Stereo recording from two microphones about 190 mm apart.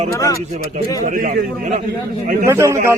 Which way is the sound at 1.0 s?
45° right (ahead or behind).